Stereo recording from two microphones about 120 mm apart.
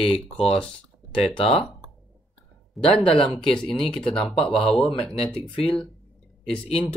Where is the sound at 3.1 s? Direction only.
50° left (ahead or behind).